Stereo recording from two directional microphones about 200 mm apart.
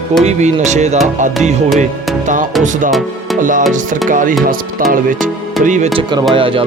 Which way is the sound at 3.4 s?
40° right (ahead or behind).